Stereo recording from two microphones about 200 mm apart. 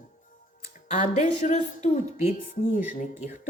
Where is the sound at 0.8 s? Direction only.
35° left (ahead or behind).